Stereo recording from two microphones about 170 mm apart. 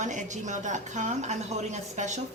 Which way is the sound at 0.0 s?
45° right (ahead or behind).